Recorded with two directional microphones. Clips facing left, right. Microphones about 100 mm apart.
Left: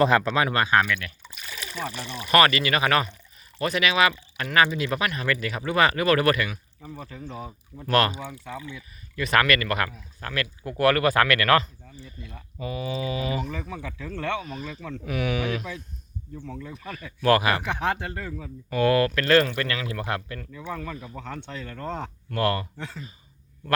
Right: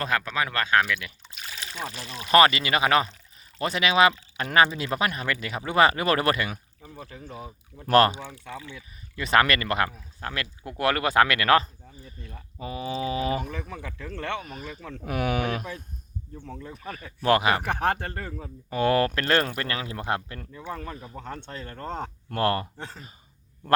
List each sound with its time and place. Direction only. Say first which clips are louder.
0.1 s speech: left 5 dB; 25° left (ahead or behind)
0.4 s speech: left 2 dB; 15° left (ahead or behind)
0.9 s speech: left 1 dB; 10° right (ahead or behind)
2.3 s speech: right 1 dB; 25° right (ahead or behind)
6.8 s speech: left 4 dB; centre (ahead or behind)
7.9 s speech: right 3 dB; 30° right (ahead or behind)
12.5 s speech: left 1 dB; 30° right (ahead or behind)
14.6 s speech: left 3 dB; 10° right (ahead or behind)
15.0 s speech: right 1 dB; 45° right (ahead or behind)
16.5 s speech: even; 25° right (ahead or behind)
17.6 s speech: right 1 dB; 50° right (ahead or behind)
18.3 s speech: left 3 dB; 25° right (ahead or behind)
21.7 s speech: even; 30° right (ahead or behind)